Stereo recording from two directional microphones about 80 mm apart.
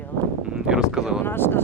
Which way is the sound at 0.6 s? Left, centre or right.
Centre.